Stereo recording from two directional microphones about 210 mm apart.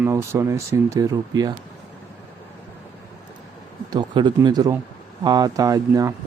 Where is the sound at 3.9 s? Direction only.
20° right (ahead or behind).